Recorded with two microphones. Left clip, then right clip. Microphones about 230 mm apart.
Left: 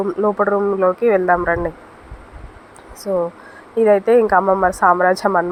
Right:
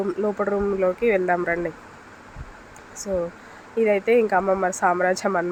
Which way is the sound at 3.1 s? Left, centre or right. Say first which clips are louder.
Left 6 dB; centre.